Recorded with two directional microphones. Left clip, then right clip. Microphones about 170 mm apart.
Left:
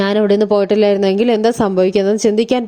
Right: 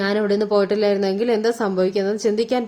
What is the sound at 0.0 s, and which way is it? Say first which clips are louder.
A woman's voice: left 6 dB; 40° left (ahead or behind).